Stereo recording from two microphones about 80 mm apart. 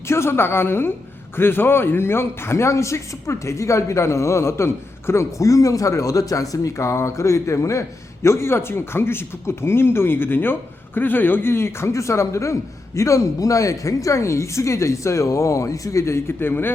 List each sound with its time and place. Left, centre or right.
0.1 s a woman's voice: left